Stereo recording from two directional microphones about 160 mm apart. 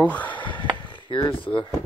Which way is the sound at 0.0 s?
10° left (ahead or behind).